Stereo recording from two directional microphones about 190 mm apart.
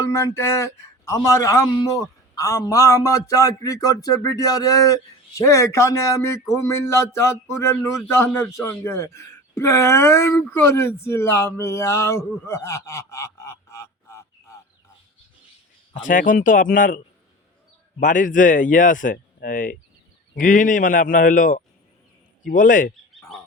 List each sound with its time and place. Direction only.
0.0 s speech: 15° left (ahead or behind)
16.0 s a man's voice: 45° left (ahead or behind)
18.0 s a man's voice: 45° left (ahead or behind)